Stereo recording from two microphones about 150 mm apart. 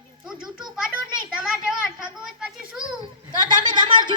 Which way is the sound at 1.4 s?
5° right (ahead or behind).